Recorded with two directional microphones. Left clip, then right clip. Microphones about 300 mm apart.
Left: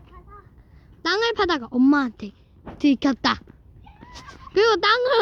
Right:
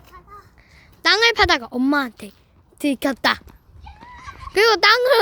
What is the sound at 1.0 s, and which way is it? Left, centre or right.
A woman's voice, centre.